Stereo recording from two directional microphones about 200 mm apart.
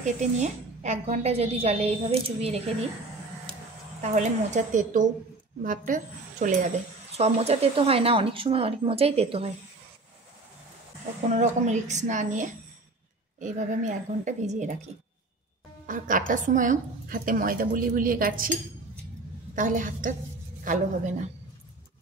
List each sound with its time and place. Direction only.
0.0 s a woman's voice: 35° right (ahead or behind)
3.5 s a sound: 5° left (ahead or behind)
4.0 s a woman's voice: 35° right (ahead or behind)
11.2 s a woman's voice: 35° right (ahead or behind)
15.9 s a woman's voice: 40° right (ahead or behind)
19.5 s a woman's voice: 40° right (ahead or behind)